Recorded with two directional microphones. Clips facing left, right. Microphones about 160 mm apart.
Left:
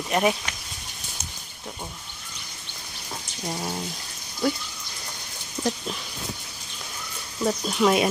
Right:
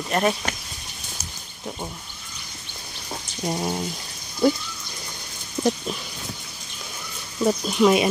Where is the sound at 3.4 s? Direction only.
20° right (ahead or behind).